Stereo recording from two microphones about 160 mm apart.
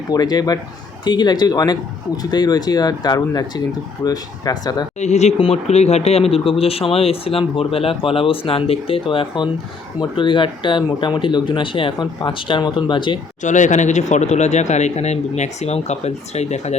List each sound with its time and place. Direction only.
0.1 s speech: 25° left (ahead or behind)
4.9 s speech: 45° left (ahead or behind)
13.4 s speech: 50° left (ahead or behind)